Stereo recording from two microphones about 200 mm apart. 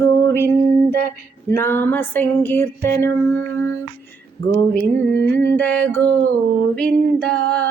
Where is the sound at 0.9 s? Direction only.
50° right (ahead or behind).